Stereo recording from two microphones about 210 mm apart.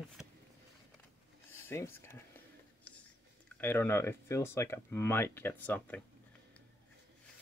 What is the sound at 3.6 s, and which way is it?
Speech, 10° left (ahead or behind).